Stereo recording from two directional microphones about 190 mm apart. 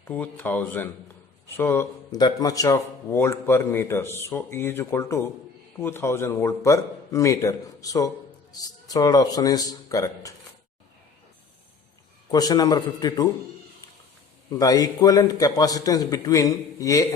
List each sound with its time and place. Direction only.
0.0 s a man's voice: 10° left (ahead or behind)
12.3 s a man's voice: 20° left (ahead or behind)
14.6 s a man's voice: 20° left (ahead or behind)